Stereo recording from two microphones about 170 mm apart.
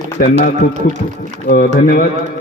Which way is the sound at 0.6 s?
55° left (ahead or behind).